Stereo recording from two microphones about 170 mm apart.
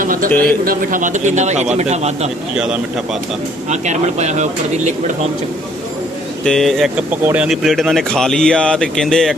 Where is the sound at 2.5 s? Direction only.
5° right (ahead or behind).